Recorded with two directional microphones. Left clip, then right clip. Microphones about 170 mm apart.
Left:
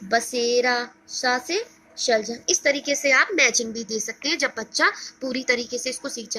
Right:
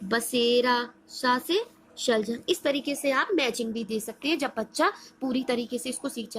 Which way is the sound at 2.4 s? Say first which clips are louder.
Left 5 dB; 75° right (ahead or behind).